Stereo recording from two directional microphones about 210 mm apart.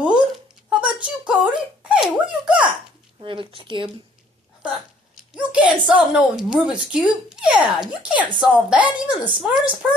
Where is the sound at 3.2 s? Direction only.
25° right (ahead or behind).